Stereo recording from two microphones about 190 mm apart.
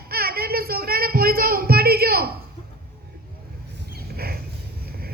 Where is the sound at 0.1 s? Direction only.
55° right (ahead or behind).